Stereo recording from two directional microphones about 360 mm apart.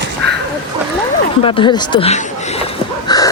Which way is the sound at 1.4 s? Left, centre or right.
Centre.